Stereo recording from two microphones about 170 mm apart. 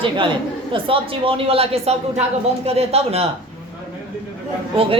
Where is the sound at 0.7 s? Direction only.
30° right (ahead or behind).